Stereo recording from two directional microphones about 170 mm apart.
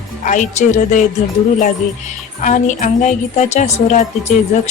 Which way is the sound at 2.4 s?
45° left (ahead or behind).